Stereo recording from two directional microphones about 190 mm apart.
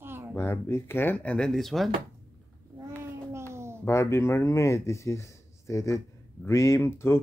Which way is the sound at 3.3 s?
15° right (ahead or behind).